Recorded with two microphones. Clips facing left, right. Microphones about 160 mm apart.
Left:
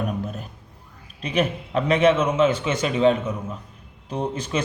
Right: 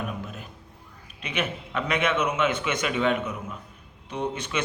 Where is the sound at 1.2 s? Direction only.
35° left (ahead or behind).